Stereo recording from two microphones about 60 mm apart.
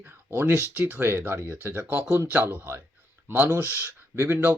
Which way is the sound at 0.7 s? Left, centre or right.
Right.